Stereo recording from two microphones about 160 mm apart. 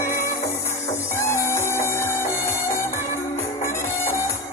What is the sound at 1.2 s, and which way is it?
Music, 15° left (ahead or behind).